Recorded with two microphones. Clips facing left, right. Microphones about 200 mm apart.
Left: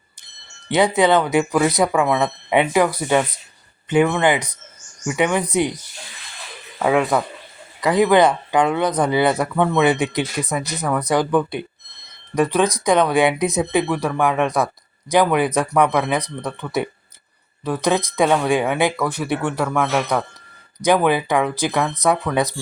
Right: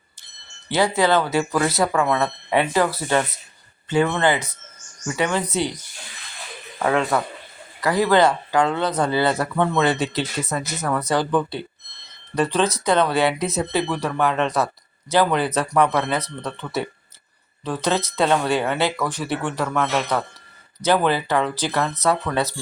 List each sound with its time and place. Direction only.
0.7 s speech: 20° left (ahead or behind)
6.8 s speech: 15° left (ahead or behind)